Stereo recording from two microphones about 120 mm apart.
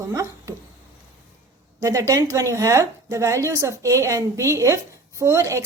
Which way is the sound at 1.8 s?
25° right (ahead or behind).